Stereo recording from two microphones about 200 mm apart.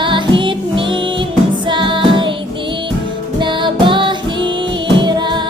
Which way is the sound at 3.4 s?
25° right (ahead or behind).